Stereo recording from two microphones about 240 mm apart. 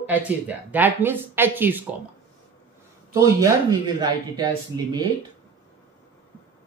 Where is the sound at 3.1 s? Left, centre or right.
Centre.